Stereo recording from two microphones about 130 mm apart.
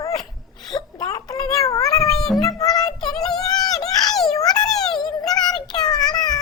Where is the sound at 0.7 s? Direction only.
30° left (ahead or behind).